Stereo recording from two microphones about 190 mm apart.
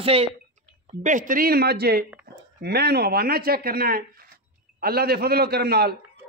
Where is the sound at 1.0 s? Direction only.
45° right (ahead or behind).